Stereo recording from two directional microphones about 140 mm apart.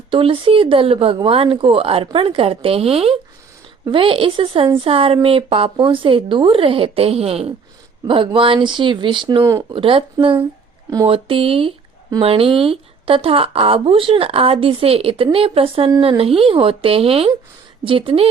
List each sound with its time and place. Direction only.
0.1 s speech: 40° right (ahead or behind)
9.4 s speech: 20° right (ahead or behind)
9.7 s speech: 40° right (ahead or behind)